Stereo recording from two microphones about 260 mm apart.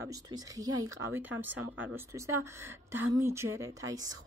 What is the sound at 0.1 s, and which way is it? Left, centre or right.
Speech, centre.